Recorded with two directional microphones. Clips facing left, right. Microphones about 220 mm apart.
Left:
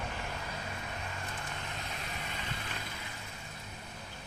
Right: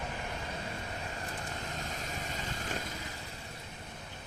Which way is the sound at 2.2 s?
40° right (ahead or behind).